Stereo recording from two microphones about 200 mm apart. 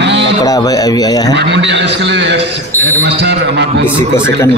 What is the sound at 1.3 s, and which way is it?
A man's voice, 60° right (ahead or behind).